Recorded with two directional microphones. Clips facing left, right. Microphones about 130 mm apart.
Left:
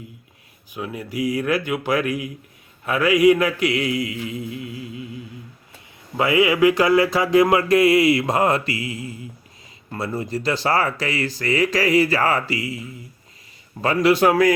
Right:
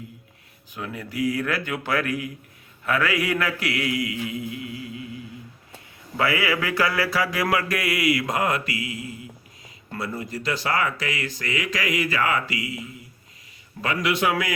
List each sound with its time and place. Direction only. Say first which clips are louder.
0.7 s speech: left 4 dB; 15° left (ahead or behind)
6.1 s speech: left 6 dB; 20° left (ahead or behind)
13.8 s speech: left 7 dB; 35° left (ahead or behind)